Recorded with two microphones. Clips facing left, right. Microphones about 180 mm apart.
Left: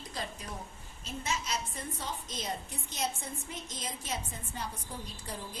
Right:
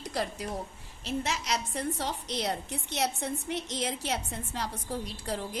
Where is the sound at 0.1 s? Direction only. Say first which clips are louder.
Right 8 dB; 80° right.